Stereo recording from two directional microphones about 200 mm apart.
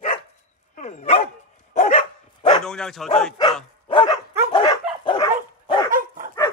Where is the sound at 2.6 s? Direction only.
5° left (ahead or behind).